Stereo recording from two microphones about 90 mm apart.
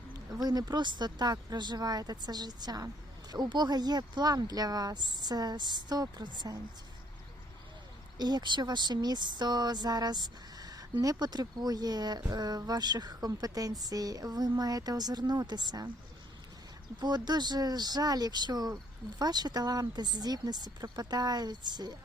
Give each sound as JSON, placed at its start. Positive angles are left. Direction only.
{"t": 0.1, "sound": "speech", "side_deg": -45}
{"t": 8.2, "sound": "speech", "side_deg": -55}
{"t": 17.0, "sound": "speech", "side_deg": -50}